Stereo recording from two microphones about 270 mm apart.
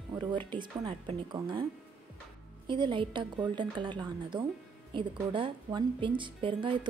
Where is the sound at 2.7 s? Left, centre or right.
Centre.